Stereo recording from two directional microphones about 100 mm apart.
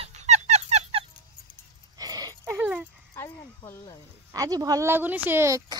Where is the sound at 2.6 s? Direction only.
15° right (ahead or behind).